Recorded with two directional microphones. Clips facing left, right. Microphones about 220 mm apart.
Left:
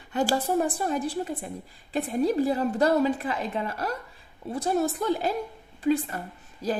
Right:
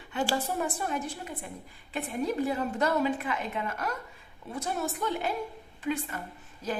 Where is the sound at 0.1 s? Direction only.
40° left (ahead or behind).